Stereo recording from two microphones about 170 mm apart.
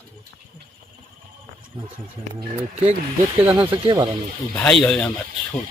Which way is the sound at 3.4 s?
10° right (ahead or behind).